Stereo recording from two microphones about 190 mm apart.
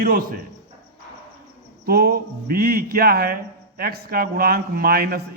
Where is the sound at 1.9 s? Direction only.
55° right (ahead or behind).